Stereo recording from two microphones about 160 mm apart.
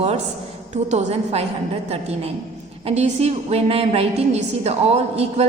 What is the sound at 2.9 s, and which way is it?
A woman's voice, 40° right (ahead or behind).